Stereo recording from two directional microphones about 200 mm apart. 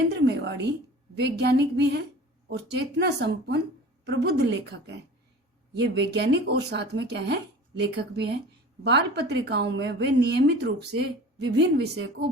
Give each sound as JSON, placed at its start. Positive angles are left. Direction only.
{"t": 0.2, "sound": "a woman's voice", "side_deg": -60}
{"t": 5.7, "sound": "a woman's voice", "side_deg": -55}